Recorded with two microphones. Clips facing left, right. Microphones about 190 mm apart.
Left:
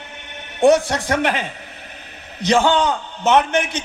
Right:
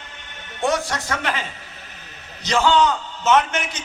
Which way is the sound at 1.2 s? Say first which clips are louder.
Left 7 dB; 60° left (ahead or behind).